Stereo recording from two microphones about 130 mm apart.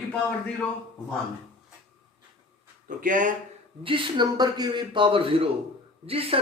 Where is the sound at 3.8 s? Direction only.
40° right (ahead or behind).